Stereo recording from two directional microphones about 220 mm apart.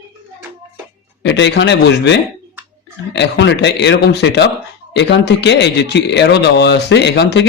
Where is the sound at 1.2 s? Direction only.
55° left (ahead or behind).